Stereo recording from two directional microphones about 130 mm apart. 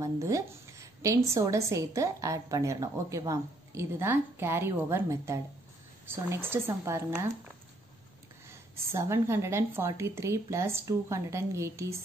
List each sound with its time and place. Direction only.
0.0 s a woman's voice: 25° right (ahead or behind)
8.7 s a woman's voice: 20° right (ahead or behind)